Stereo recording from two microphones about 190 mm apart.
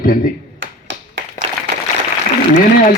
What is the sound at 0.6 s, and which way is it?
Finger snapping, 80° right.